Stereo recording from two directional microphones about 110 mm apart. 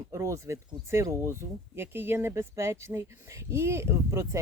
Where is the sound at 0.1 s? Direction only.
25° right (ahead or behind).